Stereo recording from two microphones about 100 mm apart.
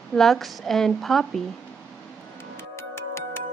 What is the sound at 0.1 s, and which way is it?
A woman's voice, 5° left (ahead or behind).